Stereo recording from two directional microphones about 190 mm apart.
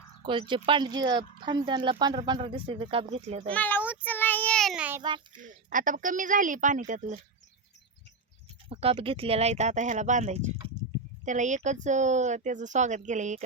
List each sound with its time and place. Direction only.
0.3 s speech: 25° right (ahead or behind)
3.5 s speech: 10° left (ahead or behind)
4.0 s child singing: 10° left (ahead or behind); by 5.0 s 10° right (ahead or behind)
5.0 s speech: 25° right (ahead or behind)
5.4 s a woman's voice: 45° right (ahead or behind)
8.7 s speech: 30° right (ahead or behind)